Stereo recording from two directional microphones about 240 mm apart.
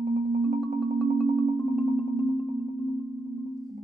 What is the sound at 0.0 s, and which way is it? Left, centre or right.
Marimba, right.